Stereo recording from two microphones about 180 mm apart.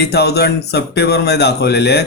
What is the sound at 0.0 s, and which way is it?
Speech, 65° left (ahead or behind).